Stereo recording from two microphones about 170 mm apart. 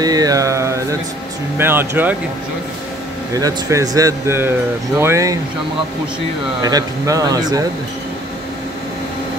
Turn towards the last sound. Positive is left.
turn(degrees=-20)  # may be behind; listen again after turning